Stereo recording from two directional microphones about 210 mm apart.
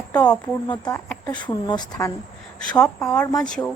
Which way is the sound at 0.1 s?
5° left (ahead or behind).